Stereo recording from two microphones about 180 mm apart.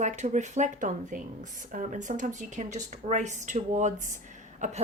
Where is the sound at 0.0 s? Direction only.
40° right (ahead or behind).